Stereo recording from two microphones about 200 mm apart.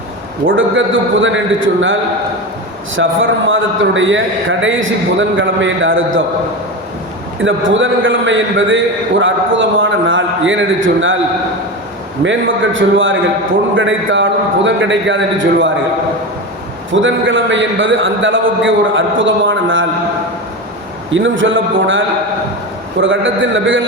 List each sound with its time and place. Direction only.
1.2 s a man's voice: 75° right (ahead or behind)
7.4 s a man's voice: 70° right (ahead or behind)
12.2 s a man's voice: 70° right (ahead or behind)
16.9 s a man's voice: 70° right (ahead or behind)
21.1 s a man's voice: 75° right (ahead or behind)